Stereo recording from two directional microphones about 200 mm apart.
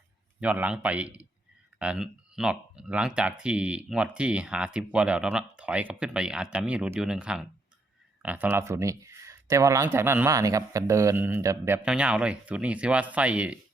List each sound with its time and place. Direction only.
0.3 s speech: 5° right (ahead or behind)